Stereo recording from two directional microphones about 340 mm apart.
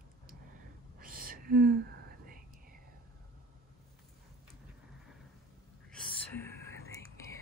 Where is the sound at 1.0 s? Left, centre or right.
Right.